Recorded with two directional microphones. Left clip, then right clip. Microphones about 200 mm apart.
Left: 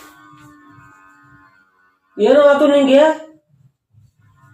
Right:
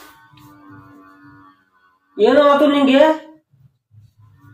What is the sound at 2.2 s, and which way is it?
Speech, centre (ahead or behind).